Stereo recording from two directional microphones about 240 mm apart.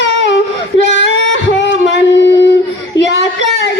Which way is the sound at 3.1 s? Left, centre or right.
Left.